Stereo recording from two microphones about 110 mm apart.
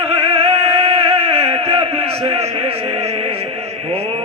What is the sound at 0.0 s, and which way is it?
Music, 65° right (ahead or behind).